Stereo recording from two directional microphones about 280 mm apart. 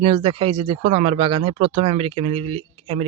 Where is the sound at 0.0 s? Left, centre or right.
Centre.